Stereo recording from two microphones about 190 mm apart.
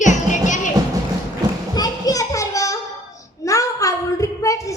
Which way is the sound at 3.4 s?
15° left (ahead or behind).